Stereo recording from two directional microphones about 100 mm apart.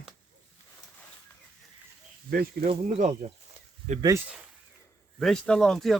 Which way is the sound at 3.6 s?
90° right.